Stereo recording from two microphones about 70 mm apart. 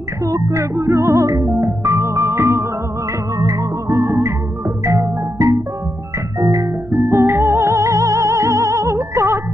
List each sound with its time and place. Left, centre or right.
0.2 s music: right
3.3 s music: right
3.9 s music: right
6.4 s organ: right
6.9 s music: right